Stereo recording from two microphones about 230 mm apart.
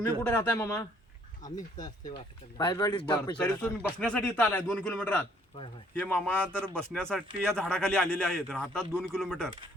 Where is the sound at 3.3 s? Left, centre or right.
Centre.